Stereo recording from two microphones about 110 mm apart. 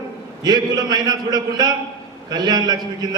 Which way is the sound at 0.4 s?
40° right (ahead or behind).